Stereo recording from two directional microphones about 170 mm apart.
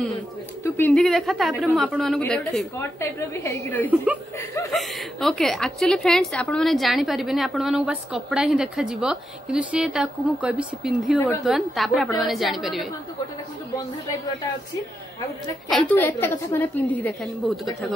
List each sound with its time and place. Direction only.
0.7 s a woman's voice: 10° left (ahead or behind)
2.8 s a woman's voice: 15° left (ahead or behind)
3.9 s speech: 10° right (ahead or behind)
4.7 s a woman's voice: centre (ahead or behind)
15.7 s a woman's voice: 10° left (ahead or behind)